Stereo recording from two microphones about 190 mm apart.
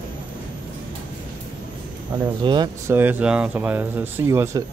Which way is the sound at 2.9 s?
10° right (ahead or behind).